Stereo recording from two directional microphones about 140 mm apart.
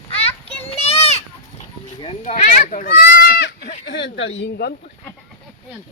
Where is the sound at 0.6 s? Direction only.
45° left (ahead or behind).